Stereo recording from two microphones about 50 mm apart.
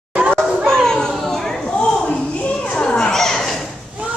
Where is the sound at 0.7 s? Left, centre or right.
Centre.